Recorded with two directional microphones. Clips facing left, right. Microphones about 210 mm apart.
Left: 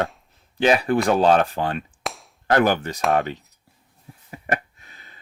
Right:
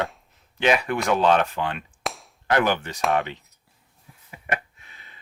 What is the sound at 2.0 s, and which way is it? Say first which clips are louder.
Cap gun: even; centre (ahead or behind).